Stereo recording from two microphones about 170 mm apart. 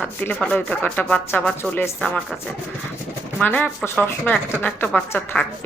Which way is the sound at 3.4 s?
10° left (ahead or behind).